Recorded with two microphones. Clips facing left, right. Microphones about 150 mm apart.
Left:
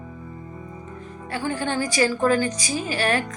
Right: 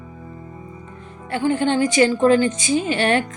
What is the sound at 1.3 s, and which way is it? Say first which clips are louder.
Speech: right 7 dB; 25° right (ahead or behind).